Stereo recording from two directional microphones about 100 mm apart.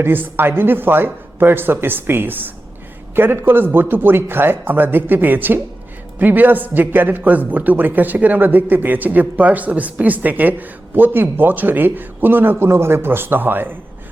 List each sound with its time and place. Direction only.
0.0 s a man's voice: 20° right (ahead or behind)